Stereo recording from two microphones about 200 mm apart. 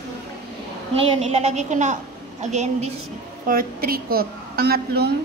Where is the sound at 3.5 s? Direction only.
50° right (ahead or behind).